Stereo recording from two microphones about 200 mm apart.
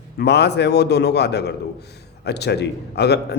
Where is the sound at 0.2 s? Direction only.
55° left (ahead or behind).